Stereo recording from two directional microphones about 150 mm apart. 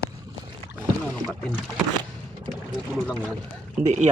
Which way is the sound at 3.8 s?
5° right (ahead or behind).